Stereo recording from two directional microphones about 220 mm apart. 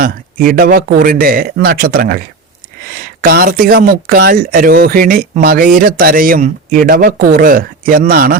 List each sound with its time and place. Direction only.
0.0 s speech: 40° right (ahead or behind)